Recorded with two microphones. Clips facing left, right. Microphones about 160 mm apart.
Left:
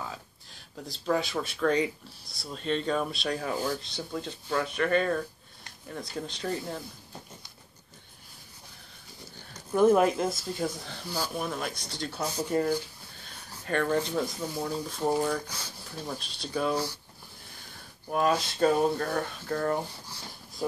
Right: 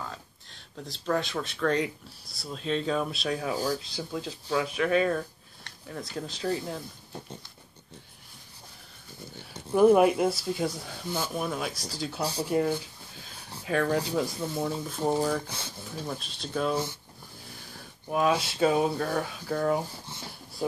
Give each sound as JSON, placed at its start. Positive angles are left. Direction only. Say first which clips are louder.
{"t": 0.0, "sound": "speech", "louder": "even", "side_deg": 5}
{"t": 9.8, "sound": "speech", "louder": "right 2 dB", "side_deg": -5}
{"t": 12.2, "sound": "speech", "louder": "right 1 dB", "side_deg": -30}
{"t": 12.4, "sound": "speech", "louder": "even", "side_deg": -5}
{"t": 18.1, "sound": "speech", "louder": "right 1 dB", "side_deg": -5}